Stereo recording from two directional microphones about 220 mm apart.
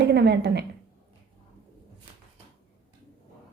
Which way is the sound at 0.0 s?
50° right (ahead or behind).